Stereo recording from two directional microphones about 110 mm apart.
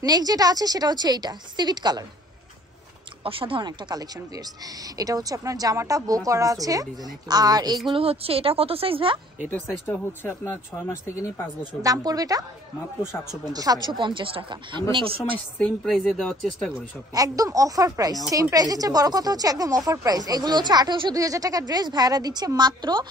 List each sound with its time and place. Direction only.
0.0 s speech: 35° right (ahead or behind)
3.3 s speech: 55° right (ahead or behind)
3.6 s speech: 35° right (ahead or behind)
7.9 s a woman's voice: 60° right (ahead or behind)
9.8 s speech: 20° left (ahead or behind)
11.8 s speech: 35° right (ahead or behind)
13.5 s speech: 35° right (ahead or behind)
13.8 s speech: 45° right (ahead or behind)
15.6 s speech: 5° left (ahead or behind)
17.1 s speech: 35° right (ahead or behind)